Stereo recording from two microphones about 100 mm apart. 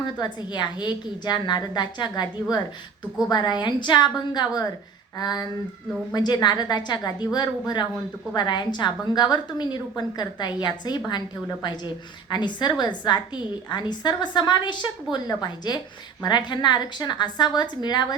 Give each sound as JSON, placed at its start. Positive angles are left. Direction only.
{"t": 0.0, "sound": "a woman's voice", "side_deg": 45}